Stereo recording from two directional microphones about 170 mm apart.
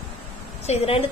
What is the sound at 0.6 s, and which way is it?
Speech, 35° left (ahead or behind).